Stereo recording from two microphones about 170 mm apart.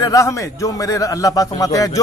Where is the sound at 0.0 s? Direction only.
20° left (ahead or behind).